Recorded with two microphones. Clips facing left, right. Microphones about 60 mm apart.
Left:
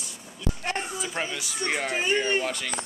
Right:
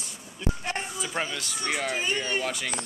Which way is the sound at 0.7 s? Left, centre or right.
Centre.